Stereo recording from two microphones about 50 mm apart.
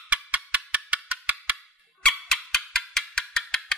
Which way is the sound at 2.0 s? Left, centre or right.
Centre.